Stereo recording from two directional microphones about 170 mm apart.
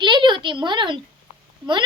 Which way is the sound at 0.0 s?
30° right (ahead or behind).